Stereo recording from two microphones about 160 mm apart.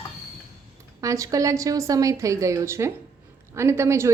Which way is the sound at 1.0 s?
20° right (ahead or behind).